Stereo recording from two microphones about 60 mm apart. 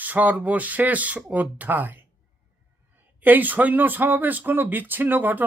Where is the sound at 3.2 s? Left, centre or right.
Right.